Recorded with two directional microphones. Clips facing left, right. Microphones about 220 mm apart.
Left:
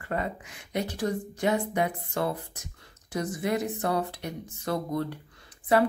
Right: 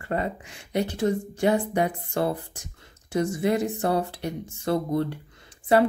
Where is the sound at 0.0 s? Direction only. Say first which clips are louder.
Right 3 dB; 30° right (ahead or behind).